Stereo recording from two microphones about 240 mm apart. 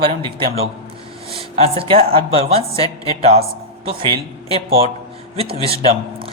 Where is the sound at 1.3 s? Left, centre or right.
Right.